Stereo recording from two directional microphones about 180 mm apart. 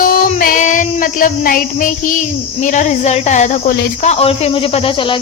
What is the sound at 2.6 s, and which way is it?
Speech, 40° left (ahead or behind).